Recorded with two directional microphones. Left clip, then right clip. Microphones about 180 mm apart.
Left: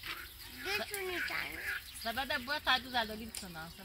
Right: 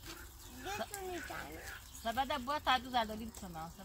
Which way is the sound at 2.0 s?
15° left (ahead or behind).